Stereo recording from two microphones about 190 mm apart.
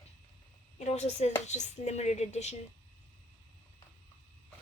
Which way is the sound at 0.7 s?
35° left (ahead or behind).